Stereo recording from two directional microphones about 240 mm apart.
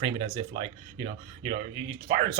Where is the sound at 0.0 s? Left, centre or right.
Right.